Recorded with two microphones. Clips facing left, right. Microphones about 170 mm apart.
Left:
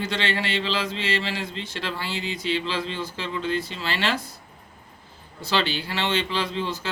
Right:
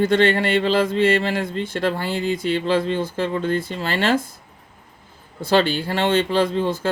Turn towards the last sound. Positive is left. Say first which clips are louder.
# right 8 dB
turn(degrees=-50)  # may be behind; listen again after turning